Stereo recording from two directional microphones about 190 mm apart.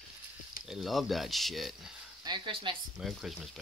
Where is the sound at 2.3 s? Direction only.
25° right (ahead or behind).